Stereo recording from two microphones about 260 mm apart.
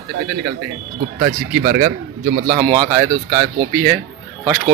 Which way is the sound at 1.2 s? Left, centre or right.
Right.